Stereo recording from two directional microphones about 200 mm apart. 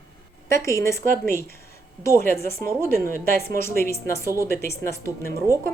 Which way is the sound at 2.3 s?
10° left (ahead or behind).